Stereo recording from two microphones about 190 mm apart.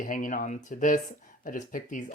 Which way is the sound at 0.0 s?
45° left (ahead or behind).